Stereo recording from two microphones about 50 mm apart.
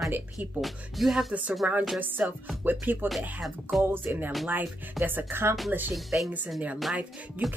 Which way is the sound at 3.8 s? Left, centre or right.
Right.